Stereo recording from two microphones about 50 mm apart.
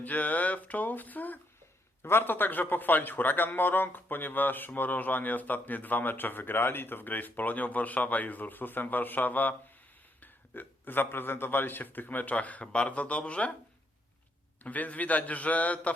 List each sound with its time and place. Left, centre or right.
0.0 s a man's voice: left
2.0 s a man's voice: left
14.6 s a man's voice: left